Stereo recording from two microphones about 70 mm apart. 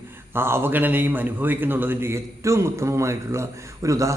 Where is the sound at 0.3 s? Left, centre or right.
Right.